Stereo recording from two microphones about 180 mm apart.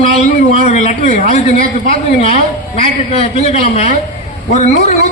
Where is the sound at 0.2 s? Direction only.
40° left (ahead or behind).